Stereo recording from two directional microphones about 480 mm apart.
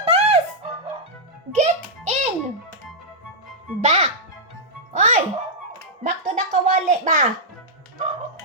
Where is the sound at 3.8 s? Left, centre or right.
Centre.